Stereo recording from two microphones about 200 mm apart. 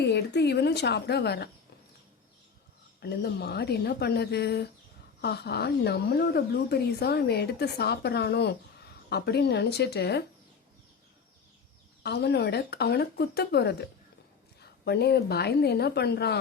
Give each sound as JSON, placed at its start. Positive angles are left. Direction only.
{"t": 0.0, "sound": "speech", "side_deg": 55}
{"t": 3.0, "sound": "speech", "side_deg": 55}
{"t": 12.0, "sound": "speech", "side_deg": 55}